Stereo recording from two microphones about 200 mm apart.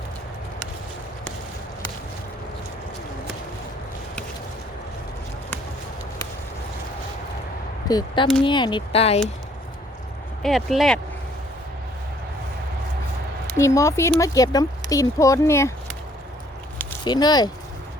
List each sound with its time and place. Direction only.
7.9 s speech: 20° left (ahead or behind)
10.4 s speech: centre (ahead or behind)
13.5 s speech: 15° left (ahead or behind)
17.0 s speech: 20° left (ahead or behind)